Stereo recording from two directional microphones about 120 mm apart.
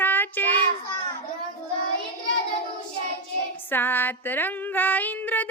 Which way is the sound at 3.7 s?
15° left (ahead or behind).